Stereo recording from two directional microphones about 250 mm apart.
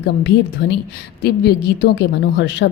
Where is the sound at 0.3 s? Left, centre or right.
Left.